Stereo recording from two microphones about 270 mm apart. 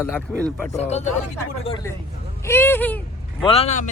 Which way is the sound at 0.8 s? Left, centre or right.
Left.